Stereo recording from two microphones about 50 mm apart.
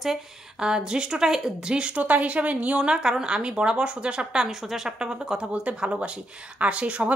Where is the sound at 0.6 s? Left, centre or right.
Centre.